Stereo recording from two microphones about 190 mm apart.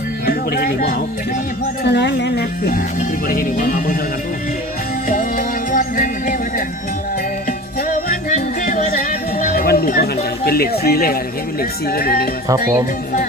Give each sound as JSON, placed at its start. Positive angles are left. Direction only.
{"t": 0.3, "sound": "speech", "side_deg": 50}
{"t": 1.8, "sound": "a woman's voice", "side_deg": 60}
{"t": 5.0, "sound": "music", "side_deg": 45}
{"t": 7.8, "sound": "music", "side_deg": 50}
{"t": 10.4, "sound": "speech", "side_deg": 55}
{"t": 12.5, "sound": "speech", "side_deg": -15}